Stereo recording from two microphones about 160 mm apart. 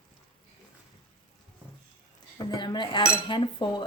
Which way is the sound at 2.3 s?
25° left (ahead or behind).